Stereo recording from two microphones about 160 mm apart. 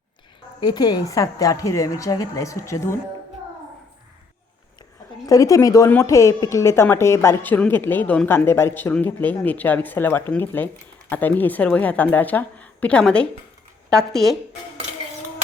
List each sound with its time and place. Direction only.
0.6 s a woman's voice: 25° left (ahead or behind)
4.8 s a sound: 20° left (ahead or behind)
5.9 s a woman's voice: 15° left (ahead or behind); by 14.3 s centre (ahead or behind)